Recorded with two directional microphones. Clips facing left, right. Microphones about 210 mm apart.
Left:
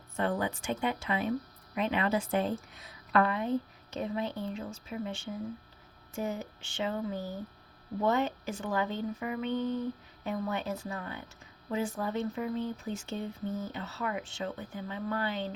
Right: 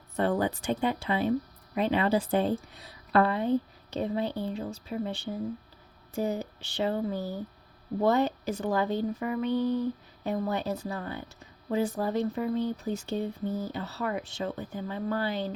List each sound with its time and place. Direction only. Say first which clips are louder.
0.2 s speech: right 4 dB; 35° right (ahead or behind)